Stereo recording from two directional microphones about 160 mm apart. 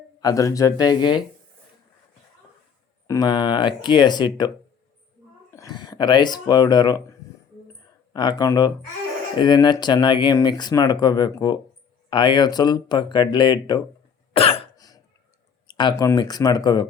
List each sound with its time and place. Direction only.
0.2 s speech: 20° left (ahead or behind)
3.1 s speech: 25° left (ahead or behind)
14.3 s cough: 35° left (ahead or behind)
14.8 s cough: 25° left (ahead or behind)
15.6 s speech: 25° left (ahead or behind)